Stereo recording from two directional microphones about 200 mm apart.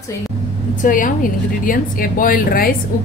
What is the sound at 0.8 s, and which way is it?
A woman's voice, 40° left (ahead or behind).